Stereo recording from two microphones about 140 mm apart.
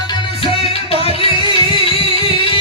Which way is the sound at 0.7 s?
45° left (ahead or behind).